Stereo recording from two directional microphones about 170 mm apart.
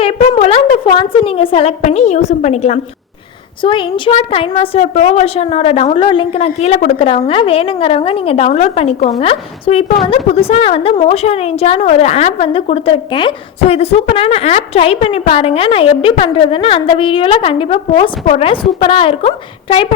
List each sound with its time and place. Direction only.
0.0 s a woman's voice: 40° left (ahead or behind)
3.6 s a woman's voice: 30° left (ahead or behind)
4.8 s a woman's voice: 45° left (ahead or behind)